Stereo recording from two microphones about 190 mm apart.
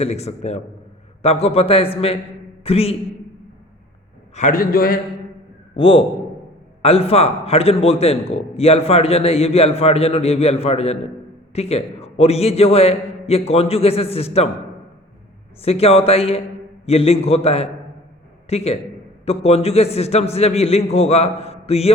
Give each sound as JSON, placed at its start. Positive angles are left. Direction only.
{"t": 0.0, "sound": "a man's voice", "side_deg": 35}
{"t": 4.4, "sound": "a man's voice", "side_deg": 45}
{"t": 5.7, "sound": "a man's voice", "side_deg": 30}
{"t": 15.6, "sound": "a man's voice", "side_deg": 30}